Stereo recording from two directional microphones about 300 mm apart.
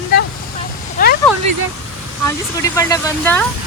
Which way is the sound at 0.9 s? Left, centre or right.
Left.